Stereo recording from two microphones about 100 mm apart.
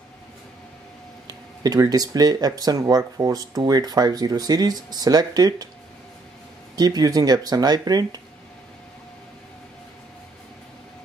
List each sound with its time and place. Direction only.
1.2 s speech: 40° right (ahead or behind)
6.7 s speech: 40° right (ahead or behind)